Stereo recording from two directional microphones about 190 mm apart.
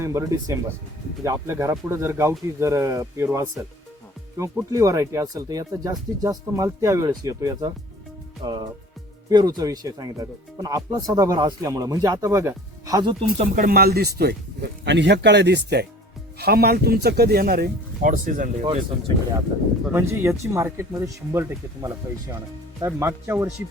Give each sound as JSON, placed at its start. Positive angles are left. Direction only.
{"t": 0.0, "sound": "speech", "side_deg": -15}
{"t": 9.3, "sound": "speech", "side_deg": -20}
{"t": 13.3, "sound": "speech", "side_deg": -45}
{"t": 18.6, "sound": "speech", "side_deg": -30}
{"t": 19.8, "sound": "speech", "side_deg": -15}